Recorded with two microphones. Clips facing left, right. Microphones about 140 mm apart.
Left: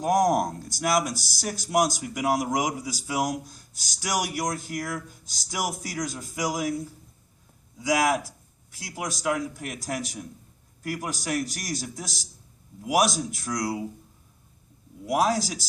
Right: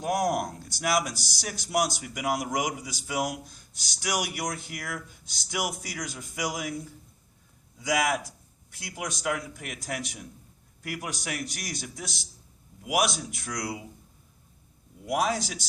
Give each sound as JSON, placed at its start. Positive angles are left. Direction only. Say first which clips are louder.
{"t": 0.0, "sound": "speech", "louder": "left 5 dB", "side_deg": 40}
{"t": 8.9, "sound": "speech", "louder": "left 3 dB", "side_deg": 40}
{"t": 15.1, "sound": "speech", "louder": "left 3 dB", "side_deg": 40}